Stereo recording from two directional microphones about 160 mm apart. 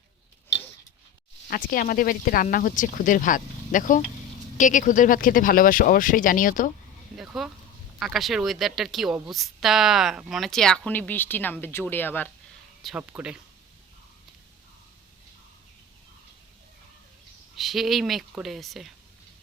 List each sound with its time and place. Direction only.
1.5 s speech: 65° left (ahead or behind)
7.2 s a woman's voice: centre (ahead or behind)
12.8 s a woman's voice: 5° right (ahead or behind)
17.5 s a woman's voice: centre (ahead or behind)